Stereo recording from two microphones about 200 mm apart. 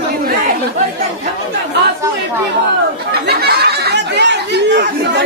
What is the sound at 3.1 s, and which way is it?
Speech, 55° right (ahead or behind).